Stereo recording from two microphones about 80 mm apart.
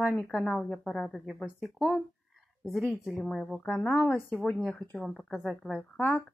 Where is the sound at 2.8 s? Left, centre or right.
Right.